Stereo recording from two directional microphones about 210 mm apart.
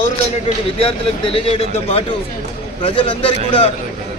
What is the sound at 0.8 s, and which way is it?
Speech, 25° left (ahead or behind).